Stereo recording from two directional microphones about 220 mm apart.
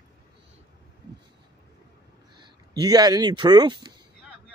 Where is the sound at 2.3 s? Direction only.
20° right (ahead or behind).